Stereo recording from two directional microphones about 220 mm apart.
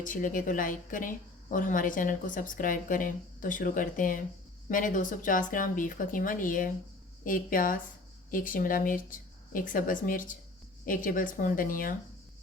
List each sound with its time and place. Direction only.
0.0 s a woman's voice: 35° left (ahead or behind)